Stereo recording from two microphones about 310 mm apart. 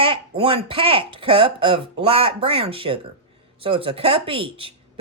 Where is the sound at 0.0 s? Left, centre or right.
Centre.